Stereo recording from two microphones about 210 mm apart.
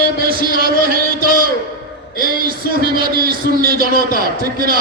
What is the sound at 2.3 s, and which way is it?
A man's voice, 45° right (ahead or behind).